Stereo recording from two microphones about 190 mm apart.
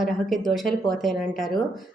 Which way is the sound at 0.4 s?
Centre (ahead or behind).